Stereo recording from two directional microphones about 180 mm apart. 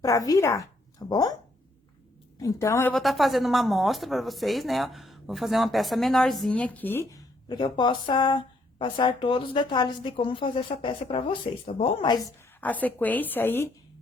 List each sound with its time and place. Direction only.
0.0 s a woman's voice: 20° left (ahead or behind)
2.4 s a woman's voice: 15° left (ahead or behind)
2.9 s a woman's voice: centre (ahead or behind); by 12.2 s 25° left (ahead or behind)
12.5 s a woman's voice: 10° left (ahead or behind)